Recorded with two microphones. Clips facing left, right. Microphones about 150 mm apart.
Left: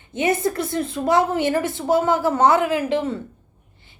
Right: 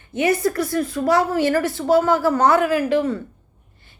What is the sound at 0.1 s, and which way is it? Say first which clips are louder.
A woman's voice: right 2 dB; 20° left (ahead or behind).